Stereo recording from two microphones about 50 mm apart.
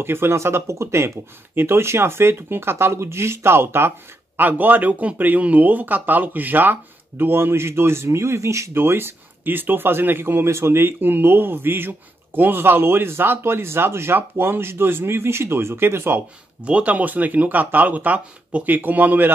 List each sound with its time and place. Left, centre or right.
0.0 s speech: right
1.5 s speech: right
4.4 s a man's voice: right
8.7 s speech: right
16.6 s a man's voice: right